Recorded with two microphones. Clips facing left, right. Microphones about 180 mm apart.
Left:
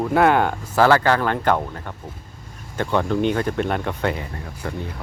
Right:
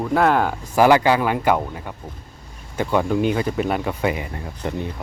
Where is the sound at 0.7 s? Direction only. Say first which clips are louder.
Right 2 dB; 15° right (ahead or behind).